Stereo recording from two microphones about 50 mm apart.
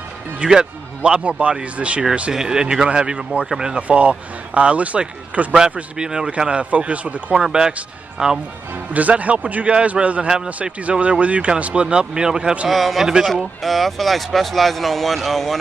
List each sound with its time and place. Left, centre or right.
0.5 s speech: centre
2.3 s speech: centre
3.8 s speech: right
5.9 s speech: centre
8.9 s speech: right; by 12.5 s centre
12.6 s speech: centre